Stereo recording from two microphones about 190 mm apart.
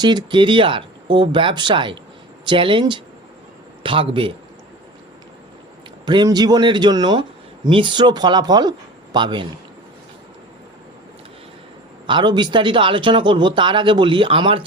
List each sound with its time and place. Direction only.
0.0 s speech: 20° right (ahead or behind)
6.1 s speech: 20° right (ahead or behind)
12.0 s speech: 25° right (ahead or behind)